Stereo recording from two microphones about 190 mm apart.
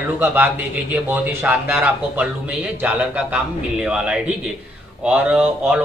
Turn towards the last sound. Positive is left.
turn(degrees=-5)  # may be behind; listen again after turning